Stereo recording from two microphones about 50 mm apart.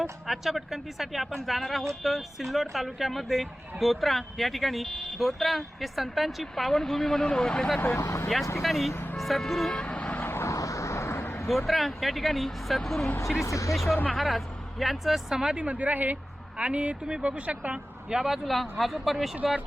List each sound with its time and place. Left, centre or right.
0.0 s speech: centre
7.3 s speech: centre
7.8 s speech: left
8.6 s speech: centre
9.7 s vehicle: centre
10.2 s vehicle: left
10.4 s vehicle: left
11.4 s speech: centre
13.4 s speech: left
14.1 s speech: centre
15.5 s speech: right
18.1 s speech: centre